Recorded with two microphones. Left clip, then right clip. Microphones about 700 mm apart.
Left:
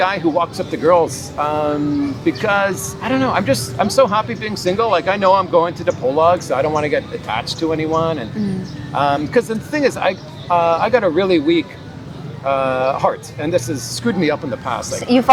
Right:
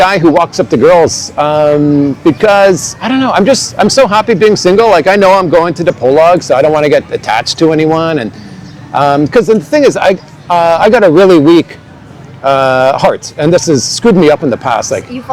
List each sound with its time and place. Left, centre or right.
0.0 s a man's voice: right